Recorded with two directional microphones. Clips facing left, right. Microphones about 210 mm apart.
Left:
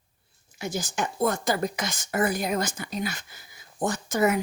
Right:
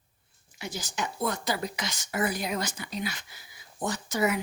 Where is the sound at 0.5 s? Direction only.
45° left (ahead or behind).